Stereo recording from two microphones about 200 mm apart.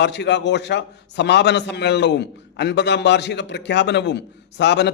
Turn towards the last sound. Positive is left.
turn(degrees=60)  # may be behind; listen again after turning